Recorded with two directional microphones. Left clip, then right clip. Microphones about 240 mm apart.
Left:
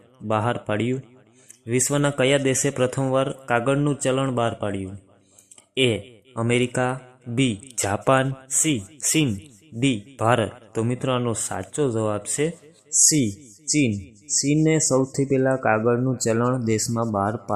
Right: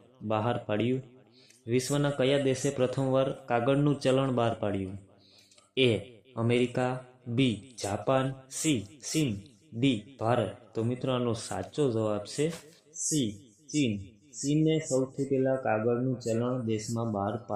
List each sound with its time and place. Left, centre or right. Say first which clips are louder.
0.3 s speech: left 6 dB; centre
13.1 s speech: left 7 dB; left
14.5 s speech: left 7 dB; left